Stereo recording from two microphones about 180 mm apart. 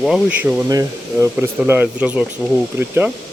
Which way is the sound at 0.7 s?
20° right (ahead or behind).